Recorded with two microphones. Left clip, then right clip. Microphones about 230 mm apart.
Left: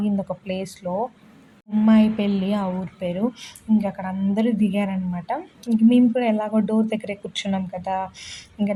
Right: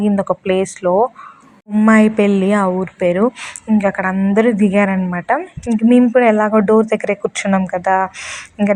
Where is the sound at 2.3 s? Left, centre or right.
Right.